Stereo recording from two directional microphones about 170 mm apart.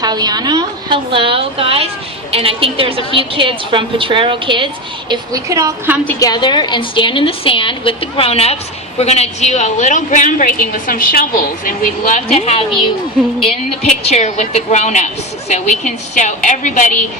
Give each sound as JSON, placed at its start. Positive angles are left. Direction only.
{"t": 0.0, "sound": "a woman's voice", "side_deg": -25}
{"t": 6.1, "sound": "a woman's voice", "side_deg": 25}
{"t": 14.1, "sound": "speech", "side_deg": 45}